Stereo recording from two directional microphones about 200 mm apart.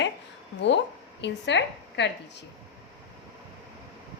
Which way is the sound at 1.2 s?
60° left (ahead or behind).